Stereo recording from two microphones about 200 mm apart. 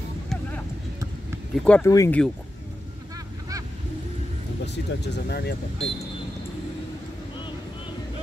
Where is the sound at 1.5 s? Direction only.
5° left (ahead or behind).